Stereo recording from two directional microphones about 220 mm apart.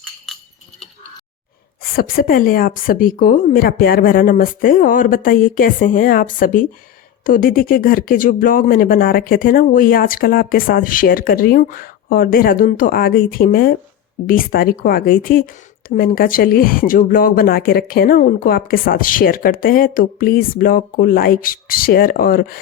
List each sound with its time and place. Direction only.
1.8 s speech: 40° left (ahead or behind)